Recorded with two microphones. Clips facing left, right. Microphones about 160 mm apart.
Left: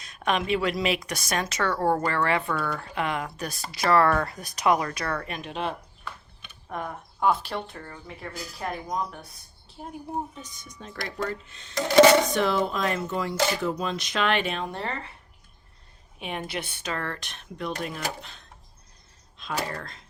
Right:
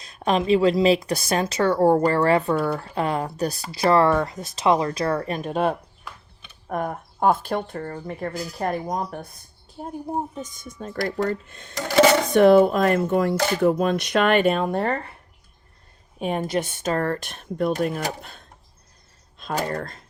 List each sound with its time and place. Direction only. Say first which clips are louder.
0.0 s a woman's voice: right 5 dB; 30° right (ahead or behind); by 15.0 s 50° right (ahead or behind)
16.1 s speech: right 9 dB; 45° right (ahead or behind)
19.7 s speech: right 8 dB; 50° right (ahead or behind)